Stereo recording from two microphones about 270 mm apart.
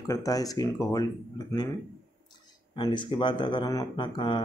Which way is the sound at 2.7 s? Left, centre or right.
Centre.